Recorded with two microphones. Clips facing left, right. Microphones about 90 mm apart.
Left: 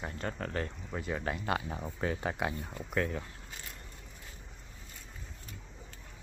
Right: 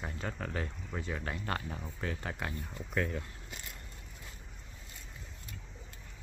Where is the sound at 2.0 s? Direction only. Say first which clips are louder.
Left 6 dB; 20° left (ahead or behind).